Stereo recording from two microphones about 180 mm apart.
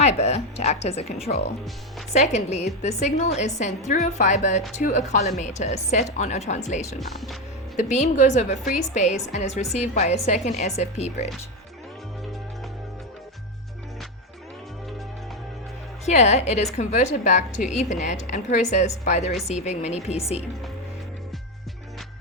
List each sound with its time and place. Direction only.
0.0 s a woman's voice: 35° left (ahead or behind)
7.0 s speech: centre (ahead or behind)
7.8 s a woman's voice: 40° left (ahead or behind)
16.0 s a woman's voice: 40° left (ahead or behind)